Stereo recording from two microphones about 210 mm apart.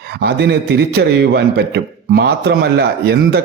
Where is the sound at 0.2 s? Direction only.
50° right (ahead or behind).